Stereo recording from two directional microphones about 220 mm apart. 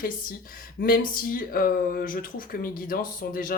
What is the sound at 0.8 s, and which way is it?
Speech, 40° left (ahead or behind).